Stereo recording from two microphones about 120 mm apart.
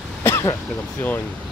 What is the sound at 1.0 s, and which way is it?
Speech, 15° left (ahead or behind).